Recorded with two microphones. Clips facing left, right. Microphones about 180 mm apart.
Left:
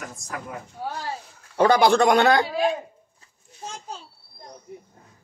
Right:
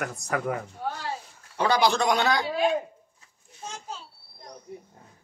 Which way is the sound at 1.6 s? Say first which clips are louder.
Left 6 dB; 50° left (ahead or behind).